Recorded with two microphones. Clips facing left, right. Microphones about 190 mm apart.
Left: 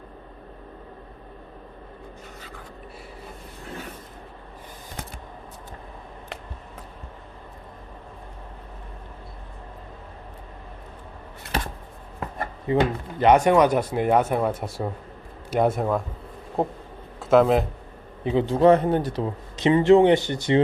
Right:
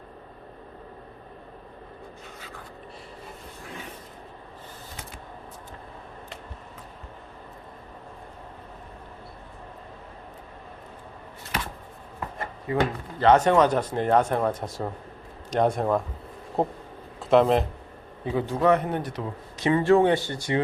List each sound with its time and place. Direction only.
12.6 s speech: 20° left (ahead or behind); by 17.7 s 5° left (ahead or behind)
18.3 s a man's voice: 25° left (ahead or behind)